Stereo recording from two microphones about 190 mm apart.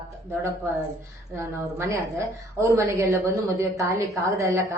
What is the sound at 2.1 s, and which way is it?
A woman's voice, 15° right (ahead or behind).